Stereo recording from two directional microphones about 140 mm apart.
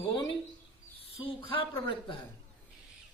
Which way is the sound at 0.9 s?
45° left (ahead or behind).